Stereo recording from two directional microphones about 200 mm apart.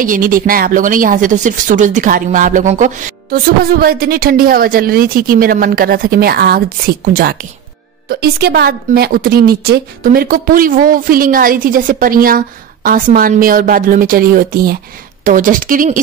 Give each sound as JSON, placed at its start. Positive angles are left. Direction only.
{"t": 0.0, "sound": "a woman's voice", "side_deg": -45}